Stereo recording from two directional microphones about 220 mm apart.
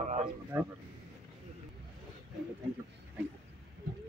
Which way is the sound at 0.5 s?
15° right (ahead or behind).